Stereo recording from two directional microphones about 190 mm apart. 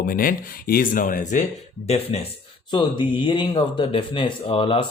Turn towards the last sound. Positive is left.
turn(degrees=25)  # may be behind; listen again after turning